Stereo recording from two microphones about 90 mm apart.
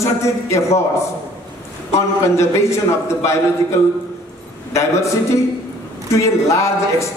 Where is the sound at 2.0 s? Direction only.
30° left (ahead or behind).